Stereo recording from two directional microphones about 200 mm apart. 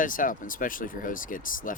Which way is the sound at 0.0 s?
40° left (ahead or behind).